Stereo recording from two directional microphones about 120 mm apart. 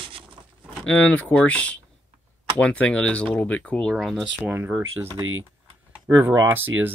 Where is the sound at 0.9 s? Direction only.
10° left (ahead or behind).